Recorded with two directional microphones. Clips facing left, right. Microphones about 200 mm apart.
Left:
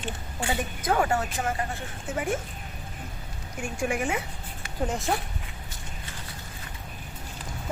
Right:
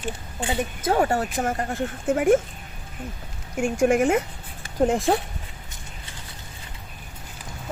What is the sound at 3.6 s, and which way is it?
Speech, 50° right (ahead or behind).